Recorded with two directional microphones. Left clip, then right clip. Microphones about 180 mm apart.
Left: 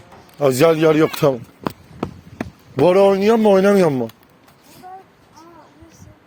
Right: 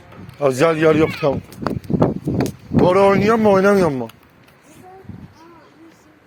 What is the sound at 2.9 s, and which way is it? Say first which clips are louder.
Speech: left 1 dB; 90° left.